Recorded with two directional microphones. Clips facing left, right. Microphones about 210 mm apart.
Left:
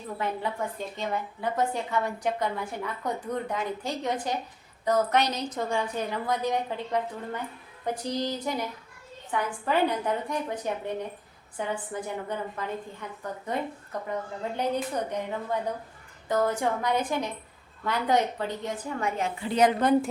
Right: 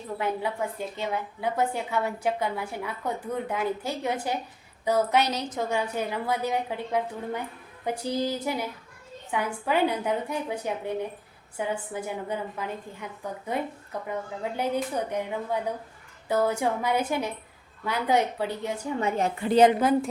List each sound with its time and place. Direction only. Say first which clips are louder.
0.2 s a woman's voice: right 2 dB; 10° right (ahead or behind)
19.4 s a woman's voice: right 8 dB; 55° right (ahead or behind)
19.8 s a woman's voice: even; centre (ahead or behind)